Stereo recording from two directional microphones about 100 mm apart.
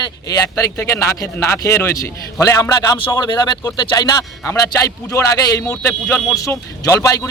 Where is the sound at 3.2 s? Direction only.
50° left (ahead or behind).